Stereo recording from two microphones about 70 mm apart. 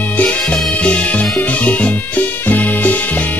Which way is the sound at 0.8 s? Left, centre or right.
Centre.